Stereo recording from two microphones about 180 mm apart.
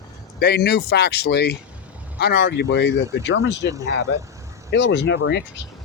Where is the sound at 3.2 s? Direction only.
85° left.